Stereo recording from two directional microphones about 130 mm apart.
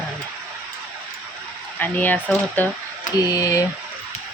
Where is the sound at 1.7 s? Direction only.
15° left (ahead or behind).